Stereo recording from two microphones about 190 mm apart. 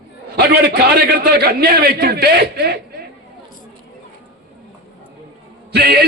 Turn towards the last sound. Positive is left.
turn(degrees=-55)  # may be behind; listen again after turning